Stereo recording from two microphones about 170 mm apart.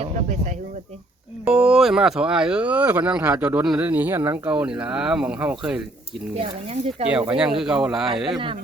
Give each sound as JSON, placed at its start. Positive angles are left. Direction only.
{"t": 0.0, "sound": "speech", "side_deg": -45}
{"t": 1.5, "sound": "speech", "side_deg": -5}
{"t": 6.3, "sound": "speech", "side_deg": -35}
{"t": 7.3, "sound": "speech", "side_deg": -5}